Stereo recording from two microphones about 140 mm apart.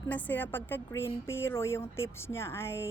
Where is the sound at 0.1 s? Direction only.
10° left (ahead or behind).